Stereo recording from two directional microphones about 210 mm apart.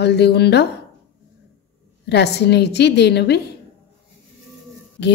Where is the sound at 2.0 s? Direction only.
50° left (ahead or behind).